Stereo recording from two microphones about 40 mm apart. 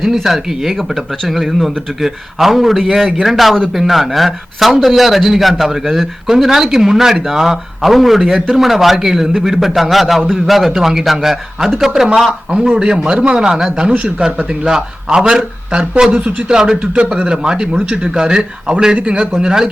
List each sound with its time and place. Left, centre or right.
0.0 s speech: centre
12.0 s a man's voice: centre